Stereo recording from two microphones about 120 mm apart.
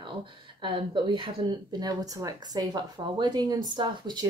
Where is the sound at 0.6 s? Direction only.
45° right (ahead or behind).